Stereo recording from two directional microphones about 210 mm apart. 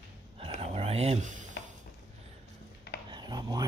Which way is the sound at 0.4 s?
30° right (ahead or behind).